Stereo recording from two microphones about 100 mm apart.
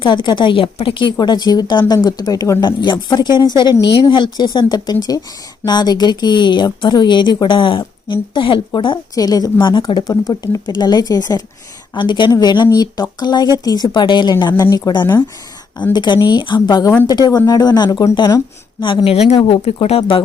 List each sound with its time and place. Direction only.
0.0 s a woman's voice: 55° left (ahead or behind)
1.2 s a woman's voice: 45° left (ahead or behind)
9.1 s speech: 40° left (ahead or behind)
11.9 s a woman's voice: 50° left (ahead or behind)
19.3 s speech: 80° left; by 20.2 s 65° left (ahead or behind)